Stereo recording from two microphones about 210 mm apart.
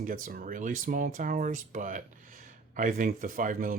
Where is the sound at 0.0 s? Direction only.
40° right (ahead or behind).